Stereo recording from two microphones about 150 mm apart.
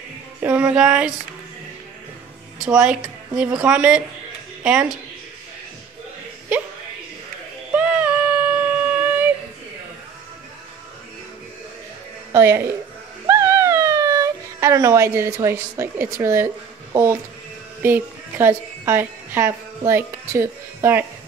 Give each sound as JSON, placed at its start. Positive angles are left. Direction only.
{"t": 0.4, "sound": "music", "side_deg": -10}
{"t": 2.6, "sound": "speech", "side_deg": -5}
{"t": 3.6, "sound": "music", "side_deg": -5}
{"t": 7.7, "sound": "a sound", "side_deg": -10}
{"t": 12.3, "sound": "a woman's voice", "side_deg": -15}
{"t": 13.3, "sound": "a sound", "side_deg": -20}
{"t": 16.9, "sound": "music", "side_deg": -15}
{"t": 17.8, "sound": "a woman's voice", "side_deg": -15}